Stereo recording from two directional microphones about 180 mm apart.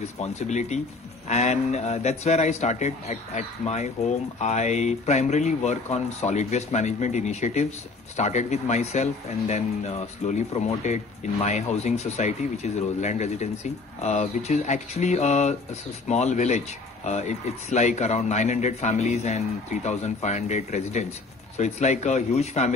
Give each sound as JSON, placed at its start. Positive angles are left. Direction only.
{"t": 0.2, "sound": "a man's voice", "side_deg": 40}